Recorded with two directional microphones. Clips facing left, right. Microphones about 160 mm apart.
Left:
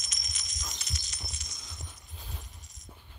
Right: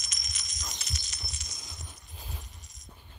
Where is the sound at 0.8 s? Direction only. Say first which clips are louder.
Right 1 dB; 75° right (ahead or behind).